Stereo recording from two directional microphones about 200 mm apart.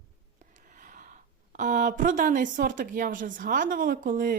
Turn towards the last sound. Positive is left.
turn(degrees=-45)  # may be behind; listen again after turning